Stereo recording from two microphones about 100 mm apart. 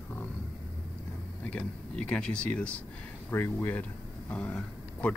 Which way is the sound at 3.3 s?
25° left (ahead or behind).